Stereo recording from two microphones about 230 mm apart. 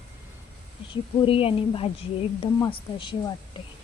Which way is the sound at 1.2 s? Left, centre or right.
Left.